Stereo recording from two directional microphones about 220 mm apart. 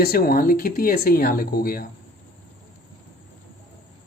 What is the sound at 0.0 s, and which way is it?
Speech, 45° left (ahead or behind).